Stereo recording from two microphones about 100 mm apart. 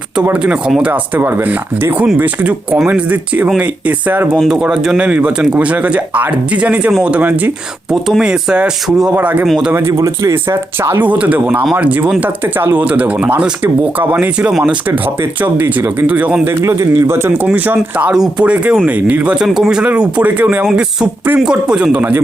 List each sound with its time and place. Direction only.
0.2 s speech: 10° right (ahead or behind)
4.3 s speech: 5° right (ahead or behind)
7.9 s speech: 5° right (ahead or behind)
9.5 s speech: 5° right (ahead or behind)
9.7 s speech: 30° right (ahead or behind)
16.6 s speech: 30° right (ahead or behind); by 20.7 s 15° right (ahead or behind)
21.3 s speech: 5° right (ahead or behind)